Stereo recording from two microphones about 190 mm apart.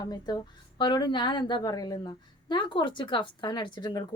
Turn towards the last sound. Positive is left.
turn(degrees=25)  # may be behind; listen again after turning